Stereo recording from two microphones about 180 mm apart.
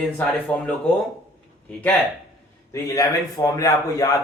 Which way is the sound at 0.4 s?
5° left (ahead or behind).